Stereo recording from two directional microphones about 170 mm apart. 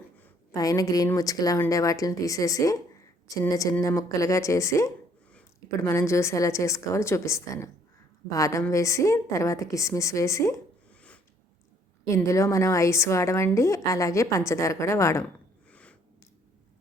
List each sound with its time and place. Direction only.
0.5 s a woman's voice: 20° left (ahead or behind)
12.0 s a woman's voice: 15° left (ahead or behind)
15.7 s a sound: 5° left (ahead or behind)